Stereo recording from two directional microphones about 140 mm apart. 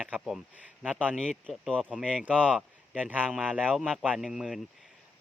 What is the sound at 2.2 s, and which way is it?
Speech, 10° right (ahead or behind).